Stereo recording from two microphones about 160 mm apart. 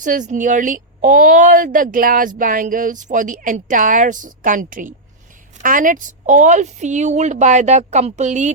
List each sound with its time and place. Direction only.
0.0 s a woman's voice: 55° right (ahead or behind)